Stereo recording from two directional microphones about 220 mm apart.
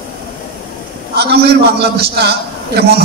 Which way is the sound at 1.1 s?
45° right (ahead or behind).